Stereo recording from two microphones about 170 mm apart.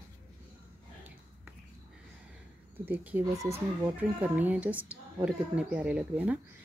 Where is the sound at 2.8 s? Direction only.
10° right (ahead or behind).